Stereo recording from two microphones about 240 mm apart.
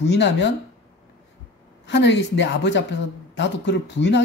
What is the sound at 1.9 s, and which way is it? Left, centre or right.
Speech, left.